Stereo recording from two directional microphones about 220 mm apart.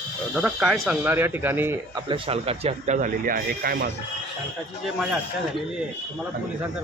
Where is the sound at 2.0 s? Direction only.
25° right (ahead or behind); by 3.9 s 45° right (ahead or behind).